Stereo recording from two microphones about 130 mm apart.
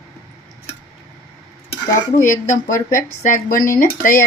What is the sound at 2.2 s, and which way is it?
Speech, 85° left.